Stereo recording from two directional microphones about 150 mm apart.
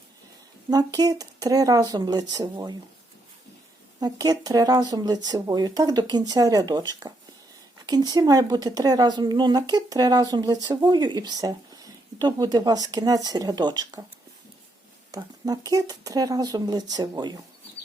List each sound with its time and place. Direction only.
0.7 s speech: 25° right (ahead or behind)
4.0 s speech: 25° right (ahead or behind)
15.1 s speech: 25° right (ahead or behind)